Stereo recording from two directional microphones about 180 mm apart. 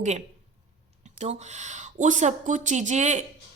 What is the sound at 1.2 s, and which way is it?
A woman's voice, 40° right (ahead or behind).